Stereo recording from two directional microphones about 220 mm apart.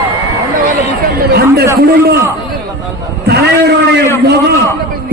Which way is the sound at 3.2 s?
50° right (ahead or behind).